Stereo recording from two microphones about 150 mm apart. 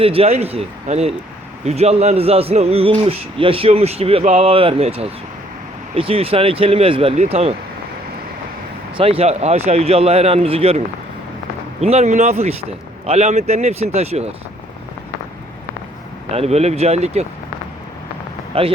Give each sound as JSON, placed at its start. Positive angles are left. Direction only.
{"t": 0.0, "sound": "a man's voice", "side_deg": -40}
{"t": 9.0, "sound": "a man's voice", "side_deg": -40}
{"t": 16.3, "sound": "a man's voice", "side_deg": -45}
{"t": 18.5, "sound": "a man's voice", "side_deg": -40}